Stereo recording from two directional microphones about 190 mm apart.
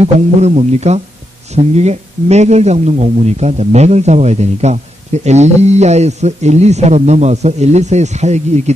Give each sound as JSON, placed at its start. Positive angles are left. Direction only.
{"t": 0.0, "sound": "a man's voice", "side_deg": -35}